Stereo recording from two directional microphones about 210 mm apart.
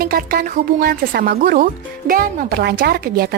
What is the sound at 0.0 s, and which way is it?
Speech, 45° right (ahead or behind).